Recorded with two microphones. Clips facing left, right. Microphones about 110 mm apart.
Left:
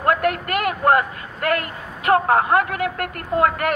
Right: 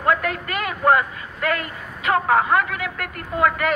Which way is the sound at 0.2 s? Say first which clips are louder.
Left 5 dB; 55° left (ahead or behind).